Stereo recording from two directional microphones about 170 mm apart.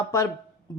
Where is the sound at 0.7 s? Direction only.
15° left (ahead or behind).